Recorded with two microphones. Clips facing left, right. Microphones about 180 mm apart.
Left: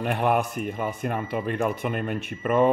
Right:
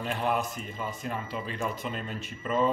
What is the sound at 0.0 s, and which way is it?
Speech, 60° left (ahead or behind).